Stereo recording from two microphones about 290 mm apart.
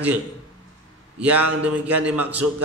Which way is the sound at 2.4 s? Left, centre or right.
Right.